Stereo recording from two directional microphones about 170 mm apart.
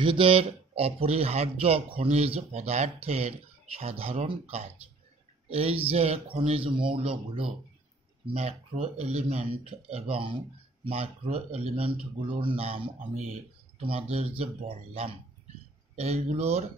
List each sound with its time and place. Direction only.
0.0 s speech: 30° right (ahead or behind)